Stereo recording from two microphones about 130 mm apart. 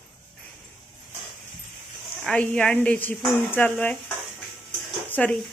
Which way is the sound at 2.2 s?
10° left (ahead or behind).